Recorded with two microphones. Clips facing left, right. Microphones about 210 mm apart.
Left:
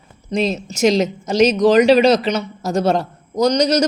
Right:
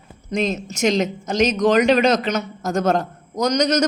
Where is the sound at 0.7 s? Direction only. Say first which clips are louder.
Left 5 dB; centre (ahead or behind).